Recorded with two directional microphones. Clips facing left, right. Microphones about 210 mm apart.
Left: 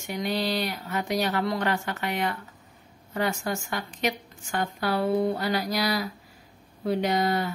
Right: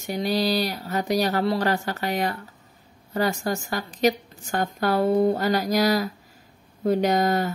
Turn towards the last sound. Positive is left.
turn(degrees=-45)  # may be behind; listen again after turning